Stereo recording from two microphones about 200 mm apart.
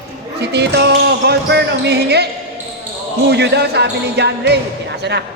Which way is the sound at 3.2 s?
55° right (ahead or behind).